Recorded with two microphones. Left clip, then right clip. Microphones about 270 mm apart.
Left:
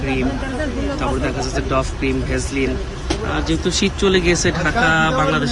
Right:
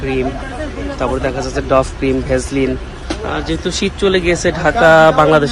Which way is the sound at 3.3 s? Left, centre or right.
Centre.